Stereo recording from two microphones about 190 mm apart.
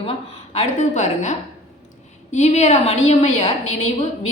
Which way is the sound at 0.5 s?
35° left (ahead or behind).